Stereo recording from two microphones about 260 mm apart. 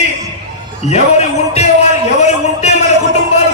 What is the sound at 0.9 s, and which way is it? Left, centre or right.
Speech, left.